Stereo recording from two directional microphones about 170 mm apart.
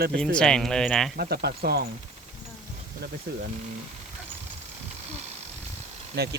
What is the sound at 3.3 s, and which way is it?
Speech, 70° right (ahead or behind).